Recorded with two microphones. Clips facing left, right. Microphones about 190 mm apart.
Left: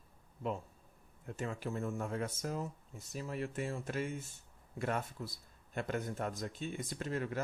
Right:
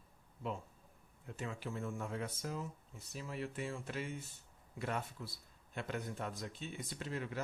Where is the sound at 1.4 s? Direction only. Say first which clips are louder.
Left 4 dB; 45° left (ahead or behind).